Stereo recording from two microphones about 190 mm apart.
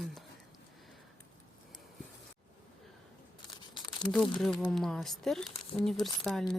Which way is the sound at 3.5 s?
25° left (ahead or behind).